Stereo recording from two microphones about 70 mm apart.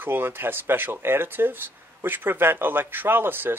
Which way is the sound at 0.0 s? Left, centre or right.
Right.